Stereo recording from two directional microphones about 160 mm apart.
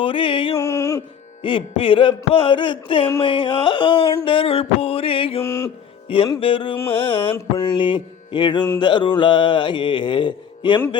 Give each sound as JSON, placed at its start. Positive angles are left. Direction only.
{"t": 0.0, "sound": "music", "side_deg": 35}
{"t": 0.5, "sound": "a sound", "side_deg": 20}
{"t": 1.4, "sound": "music", "side_deg": 30}
{"t": 5.4, "sound": "music", "side_deg": 20}
{"t": 6.4, "sound": "music", "side_deg": 35}
{"t": 7.3, "sound": "music", "side_deg": 20}